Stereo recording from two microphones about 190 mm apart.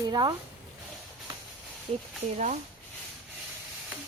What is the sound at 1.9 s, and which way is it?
Speech, 30° right (ahead or behind).